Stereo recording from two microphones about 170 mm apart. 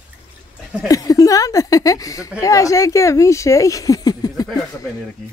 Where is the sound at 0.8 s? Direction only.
20° left (ahead or behind).